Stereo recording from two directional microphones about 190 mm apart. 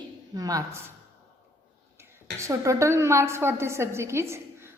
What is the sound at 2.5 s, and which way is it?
A woman's voice, 15° right (ahead or behind).